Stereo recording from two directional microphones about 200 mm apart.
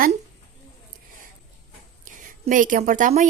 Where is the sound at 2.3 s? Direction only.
40° right (ahead or behind).